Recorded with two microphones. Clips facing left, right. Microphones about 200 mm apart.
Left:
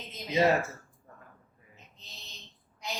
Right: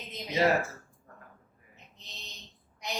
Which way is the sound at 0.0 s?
15° right (ahead or behind).